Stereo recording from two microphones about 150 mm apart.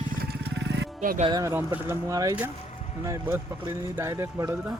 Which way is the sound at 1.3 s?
20° right (ahead or behind).